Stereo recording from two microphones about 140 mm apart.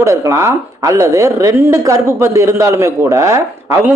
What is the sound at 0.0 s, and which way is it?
A man's voice, 20° right (ahead or behind).